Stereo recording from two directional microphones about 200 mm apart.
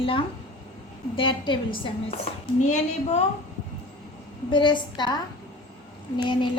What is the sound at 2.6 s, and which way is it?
Speech, 35° left (ahead or behind).